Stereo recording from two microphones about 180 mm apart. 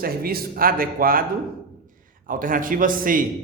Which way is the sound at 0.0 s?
55° right (ahead or behind).